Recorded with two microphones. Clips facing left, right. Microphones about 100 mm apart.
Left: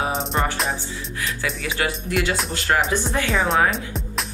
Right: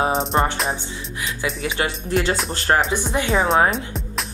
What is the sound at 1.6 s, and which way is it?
Speech, 35° right (ahead or behind).